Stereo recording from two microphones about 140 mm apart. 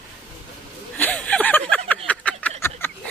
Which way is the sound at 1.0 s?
10° left (ahead or behind).